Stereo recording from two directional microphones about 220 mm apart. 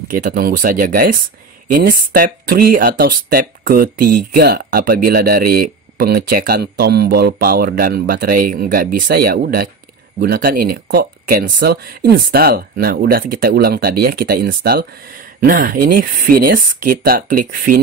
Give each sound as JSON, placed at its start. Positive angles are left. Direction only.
{"t": 0.1, "sound": "speech", "side_deg": -40}